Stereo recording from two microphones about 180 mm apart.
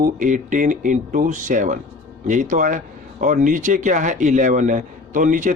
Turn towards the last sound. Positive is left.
turn(degrees=-45)  # may be behind; listen again after turning